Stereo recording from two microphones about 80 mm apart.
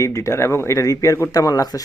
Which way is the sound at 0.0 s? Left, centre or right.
Left.